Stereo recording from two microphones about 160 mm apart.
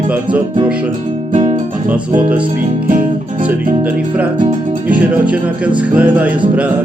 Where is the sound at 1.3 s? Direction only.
50° right (ahead or behind).